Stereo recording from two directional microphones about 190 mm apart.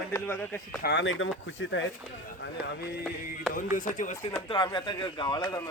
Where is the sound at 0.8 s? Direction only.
70° left (ahead or behind).